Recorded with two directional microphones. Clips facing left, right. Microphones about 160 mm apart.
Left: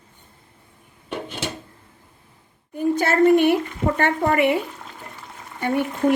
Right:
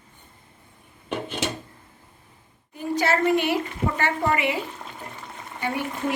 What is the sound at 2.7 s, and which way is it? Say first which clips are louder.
A woman's voice: left 4 dB; 55° left (ahead or behind).